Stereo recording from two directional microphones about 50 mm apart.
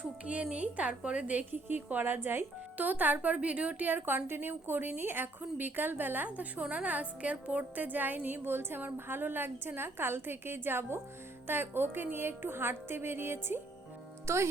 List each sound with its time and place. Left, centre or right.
0.0 s a woman's voice: right
2.7 s a woman's voice: right
7.6 s a woman's voice: right
14.3 s a child's voice: right